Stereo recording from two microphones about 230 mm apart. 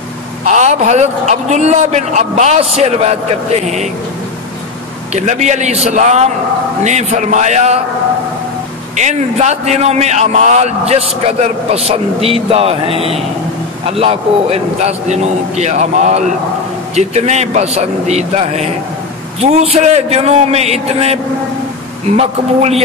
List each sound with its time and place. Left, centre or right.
0.5 s a man's voice: right
5.1 s a man's voice: right
8.9 s a man's voice: right